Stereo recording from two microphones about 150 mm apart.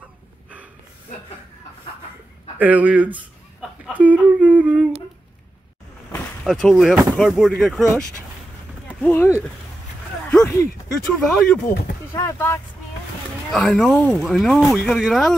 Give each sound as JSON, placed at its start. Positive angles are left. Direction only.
{"t": 2.6, "sound": "speech", "side_deg": -10}
{"t": 3.8, "sound": "humming", "side_deg": -10}
{"t": 6.4, "sound": "speech", "side_deg": 5}
{"t": 8.8, "sound": "speech", "side_deg": 15}
{"t": 11.2, "sound": "speech", "side_deg": 0}
{"t": 12.1, "sound": "speech", "side_deg": 20}
{"t": 13.5, "sound": "speech", "side_deg": 5}